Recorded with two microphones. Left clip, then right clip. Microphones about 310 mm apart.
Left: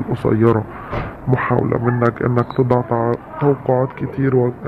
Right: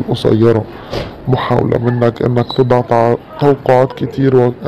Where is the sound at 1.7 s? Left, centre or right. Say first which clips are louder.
Right 4 dB; centre.